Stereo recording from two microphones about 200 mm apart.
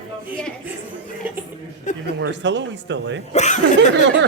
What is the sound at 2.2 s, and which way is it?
A man's voice, 65° right (ahead or behind).